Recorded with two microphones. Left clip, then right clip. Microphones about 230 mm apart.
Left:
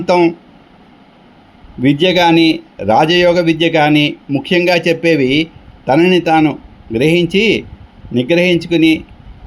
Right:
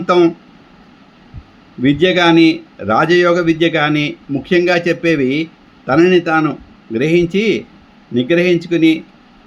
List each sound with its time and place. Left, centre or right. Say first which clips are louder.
0.0 s speech: even; left
1.8 s speech: left 1 dB; left